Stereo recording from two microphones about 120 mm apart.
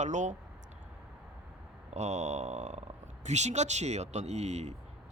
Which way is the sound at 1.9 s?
70° right (ahead or behind).